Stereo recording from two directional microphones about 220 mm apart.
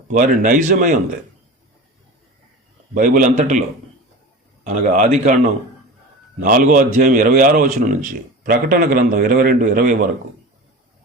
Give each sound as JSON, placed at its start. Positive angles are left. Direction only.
{"t": 0.1, "sound": "speech", "side_deg": -35}
{"t": 2.9, "sound": "speech", "side_deg": -40}
{"t": 4.6, "sound": "speech", "side_deg": -35}
{"t": 6.4, "sound": "speech", "side_deg": -40}